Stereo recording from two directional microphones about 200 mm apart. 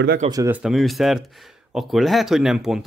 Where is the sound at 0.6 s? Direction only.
Centre (ahead or behind).